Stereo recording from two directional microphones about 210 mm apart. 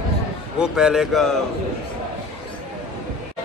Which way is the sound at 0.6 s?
Centre (ahead or behind).